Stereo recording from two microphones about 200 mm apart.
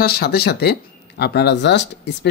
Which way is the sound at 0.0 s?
50° left (ahead or behind).